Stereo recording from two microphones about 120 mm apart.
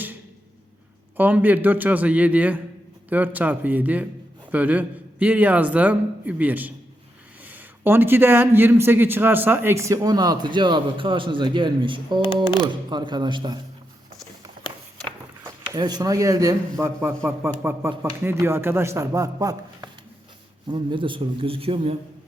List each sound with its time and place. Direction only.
1.1 s a man's voice: 15° right (ahead or behind); by 13.6 s 40° right (ahead or behind)
15.7 s a man's voice: 35° right (ahead or behind)
20.7 s a man's voice: 40° right (ahead or behind)